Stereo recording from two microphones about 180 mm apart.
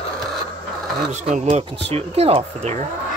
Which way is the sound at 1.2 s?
40° right (ahead or behind).